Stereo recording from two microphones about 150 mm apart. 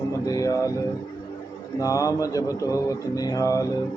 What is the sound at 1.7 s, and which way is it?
A man's voice, 20° left (ahead or behind).